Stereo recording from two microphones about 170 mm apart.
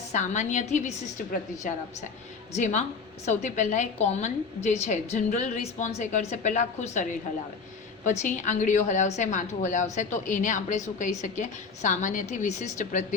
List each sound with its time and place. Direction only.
0.1 s a woman's voice: 45° left (ahead or behind)